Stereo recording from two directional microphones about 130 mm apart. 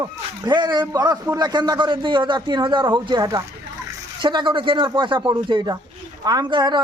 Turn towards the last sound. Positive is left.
turn(degrees=-35)  # may be behind; listen again after turning